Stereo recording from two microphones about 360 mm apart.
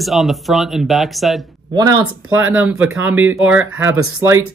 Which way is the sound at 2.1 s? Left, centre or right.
Right.